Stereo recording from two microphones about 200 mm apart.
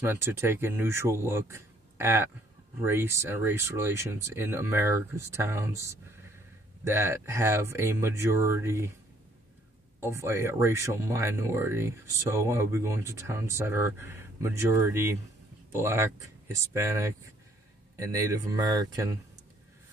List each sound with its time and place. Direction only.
0.0 s speech: 10° right (ahead or behind)
9.9 s speech: 10° right (ahead or behind)